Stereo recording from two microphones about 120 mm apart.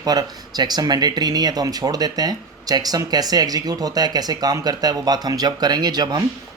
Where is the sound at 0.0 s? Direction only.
35° right (ahead or behind).